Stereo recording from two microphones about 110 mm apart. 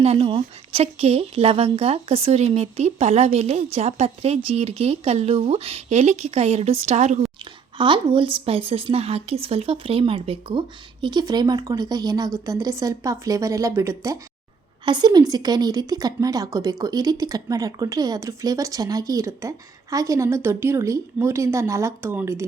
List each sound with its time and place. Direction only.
0.0 s speech: 65° right (ahead or behind); by 7.2 s 90° right
7.8 s a woman's voice: 50° right (ahead or behind)
11.0 s a woman's voice: 40° right (ahead or behind)
14.8 s a woman's voice: 40° right (ahead or behind); by 22.4 s 20° right (ahead or behind)